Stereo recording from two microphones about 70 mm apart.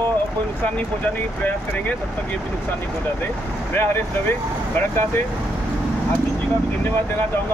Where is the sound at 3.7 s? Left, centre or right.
Left.